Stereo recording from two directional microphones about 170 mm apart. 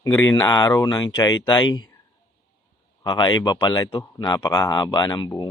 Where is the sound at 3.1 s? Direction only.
25° left (ahead or behind).